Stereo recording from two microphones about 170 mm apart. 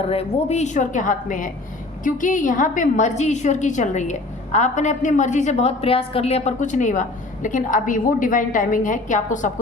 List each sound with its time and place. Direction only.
0.1 s a woman's voice: 35° left (ahead or behind)